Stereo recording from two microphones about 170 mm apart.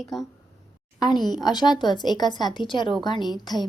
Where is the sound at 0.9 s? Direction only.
25° left (ahead or behind).